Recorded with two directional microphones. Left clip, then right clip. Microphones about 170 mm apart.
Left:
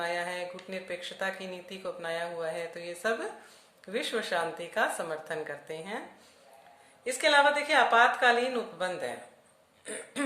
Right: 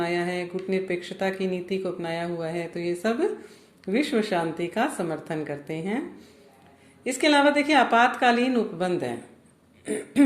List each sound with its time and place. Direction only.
0.0 s a sound: 15° right (ahead or behind)
0.7 s speech: 15° right (ahead or behind)
7.0 s speech: 15° right (ahead or behind)
9.8 s throat clearing: 15° right (ahead or behind)